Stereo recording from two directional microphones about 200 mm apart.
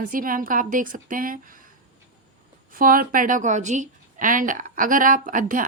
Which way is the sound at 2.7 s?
45° right (ahead or behind).